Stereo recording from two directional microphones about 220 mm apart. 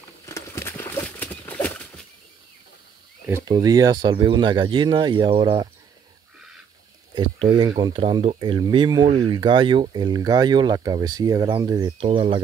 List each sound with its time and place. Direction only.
0.3 s horse: 10° left (ahead or behind)
3.3 s speech: 15° right (ahead or behind)
7.2 s speech: 20° right (ahead or behind)